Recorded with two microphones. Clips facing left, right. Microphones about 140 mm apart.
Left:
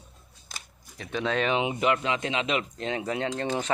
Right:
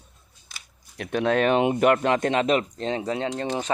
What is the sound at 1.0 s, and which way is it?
Speech, 55° right (ahead or behind).